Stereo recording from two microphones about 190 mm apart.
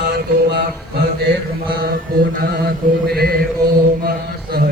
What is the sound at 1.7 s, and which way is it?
Mantra, 55° right (ahead or behind).